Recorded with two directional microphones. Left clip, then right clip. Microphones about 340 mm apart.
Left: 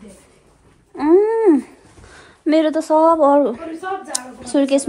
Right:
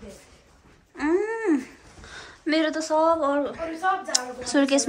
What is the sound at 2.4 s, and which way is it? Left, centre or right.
A woman's voice, centre.